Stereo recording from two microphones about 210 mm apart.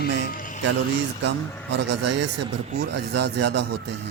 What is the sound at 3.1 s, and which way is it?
Speech, 55° right (ahead or behind).